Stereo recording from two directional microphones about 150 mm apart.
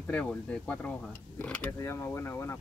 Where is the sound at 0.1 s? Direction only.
10° left (ahead or behind).